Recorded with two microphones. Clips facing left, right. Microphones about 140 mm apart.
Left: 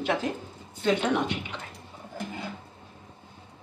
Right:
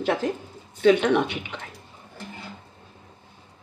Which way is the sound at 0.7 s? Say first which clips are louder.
Right 6 dB; 70° right (ahead or behind).